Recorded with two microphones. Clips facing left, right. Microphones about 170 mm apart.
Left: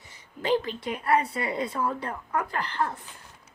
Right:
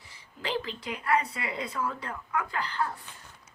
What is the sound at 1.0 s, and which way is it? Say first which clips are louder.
Speech: left 3 dB; 30° left (ahead or behind).